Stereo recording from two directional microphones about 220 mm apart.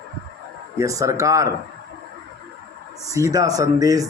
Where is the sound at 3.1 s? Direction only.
15° right (ahead or behind).